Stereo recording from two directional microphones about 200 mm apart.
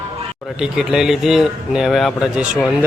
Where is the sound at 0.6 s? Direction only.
5° right (ahead or behind).